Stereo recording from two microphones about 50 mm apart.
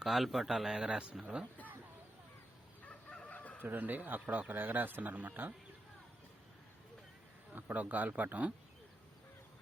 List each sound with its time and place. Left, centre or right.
0.0 s a man's voice: centre
0.9 s speech: right
2.8 s chicken: left
3.6 s speech: right
7.5 s speech: right